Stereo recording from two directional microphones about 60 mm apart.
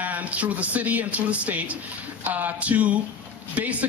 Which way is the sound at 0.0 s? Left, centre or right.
Right.